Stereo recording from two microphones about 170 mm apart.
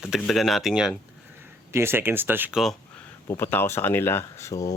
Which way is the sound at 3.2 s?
15° left (ahead or behind).